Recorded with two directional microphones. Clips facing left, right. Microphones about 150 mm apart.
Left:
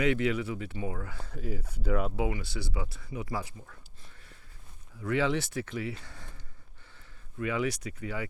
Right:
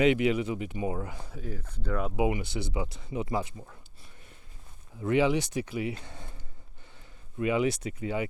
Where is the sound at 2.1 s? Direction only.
15° right (ahead or behind).